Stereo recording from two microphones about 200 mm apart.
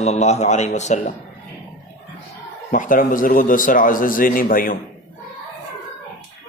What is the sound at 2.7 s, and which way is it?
Speech, 40° left (ahead or behind).